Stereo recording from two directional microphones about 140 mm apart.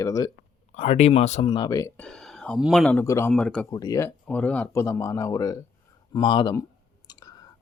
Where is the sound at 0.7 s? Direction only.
55° left (ahead or behind).